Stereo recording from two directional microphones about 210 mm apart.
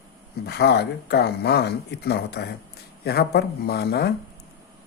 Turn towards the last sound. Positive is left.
turn(degrees=50)  # may be behind; listen again after turning